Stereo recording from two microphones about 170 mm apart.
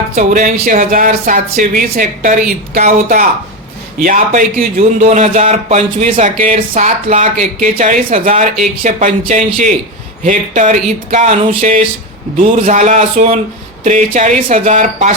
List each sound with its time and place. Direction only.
0.2 s a man's voice: 45° right (ahead or behind)